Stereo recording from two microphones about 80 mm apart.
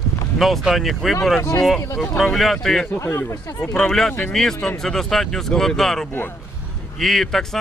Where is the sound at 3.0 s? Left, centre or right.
Left.